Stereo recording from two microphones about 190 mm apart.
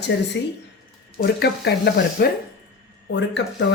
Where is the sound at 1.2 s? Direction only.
60° left (ahead or behind).